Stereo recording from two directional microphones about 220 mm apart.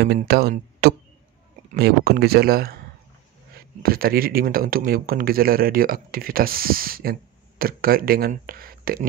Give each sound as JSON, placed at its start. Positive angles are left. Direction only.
{"t": 0.0, "sound": "speech", "side_deg": -45}